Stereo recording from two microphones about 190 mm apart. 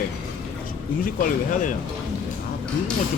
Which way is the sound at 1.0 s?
45° left (ahead or behind).